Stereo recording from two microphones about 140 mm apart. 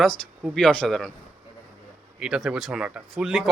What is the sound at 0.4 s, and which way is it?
Speech, 5° left (ahead or behind).